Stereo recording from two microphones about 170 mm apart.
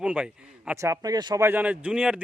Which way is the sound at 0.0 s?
5° right (ahead or behind).